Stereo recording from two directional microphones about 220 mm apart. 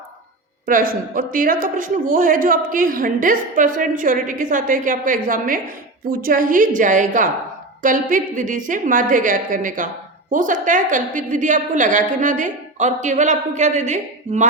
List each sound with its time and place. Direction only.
0.6 s a woman's voice: 40° right (ahead or behind)